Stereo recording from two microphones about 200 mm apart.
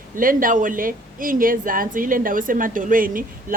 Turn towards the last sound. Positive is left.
turn(degrees=-45)  # may be behind; listen again after turning